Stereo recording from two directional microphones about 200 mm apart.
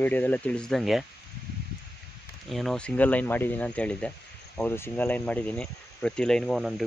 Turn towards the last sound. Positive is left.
turn(degrees=0)  # may be behind; listen again after turning